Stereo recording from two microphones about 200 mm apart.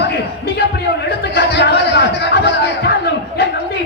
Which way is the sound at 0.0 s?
55° left (ahead or behind).